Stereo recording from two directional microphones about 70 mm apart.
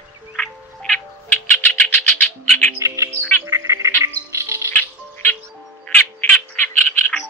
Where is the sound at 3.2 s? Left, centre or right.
Left.